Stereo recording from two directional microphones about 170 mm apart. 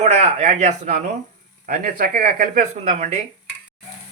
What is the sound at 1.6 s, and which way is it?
A man's voice, 60° right (ahead or behind).